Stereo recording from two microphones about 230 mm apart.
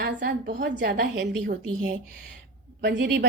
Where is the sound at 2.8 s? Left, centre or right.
Right.